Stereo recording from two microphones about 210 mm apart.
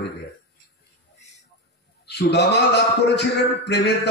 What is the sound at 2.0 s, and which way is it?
A man's voice, 55° left (ahead or behind).